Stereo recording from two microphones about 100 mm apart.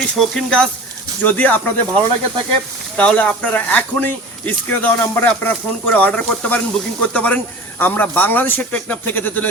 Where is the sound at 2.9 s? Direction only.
10° left (ahead or behind).